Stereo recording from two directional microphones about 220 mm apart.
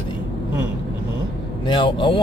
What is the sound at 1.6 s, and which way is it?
Speech, 20° left (ahead or behind).